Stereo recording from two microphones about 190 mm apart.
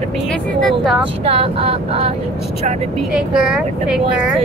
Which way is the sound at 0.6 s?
Centre (ahead or behind).